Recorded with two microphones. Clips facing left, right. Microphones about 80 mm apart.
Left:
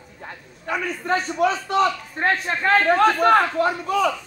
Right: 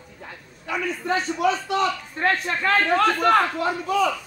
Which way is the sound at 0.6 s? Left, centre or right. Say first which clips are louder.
Left 1 dB; left.